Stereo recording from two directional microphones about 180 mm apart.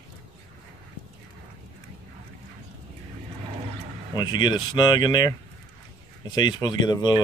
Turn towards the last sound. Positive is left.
turn(degrees=20)  # may be behind; listen again after turning